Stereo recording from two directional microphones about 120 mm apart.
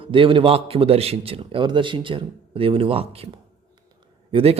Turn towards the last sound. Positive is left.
turn(degrees=-45)  # may be behind; listen again after turning